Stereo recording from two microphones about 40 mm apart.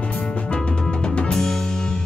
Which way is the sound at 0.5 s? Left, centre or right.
Left.